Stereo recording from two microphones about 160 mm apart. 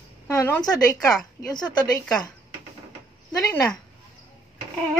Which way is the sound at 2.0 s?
5° left (ahead or behind).